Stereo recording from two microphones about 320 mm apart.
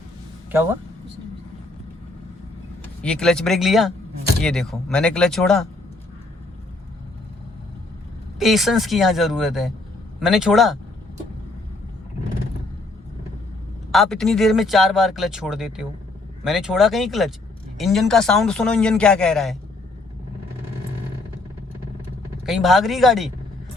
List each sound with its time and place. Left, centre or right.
3.0 s speech: centre
8.4 s speech: centre
13.9 s speech: centre
22.4 s speech: centre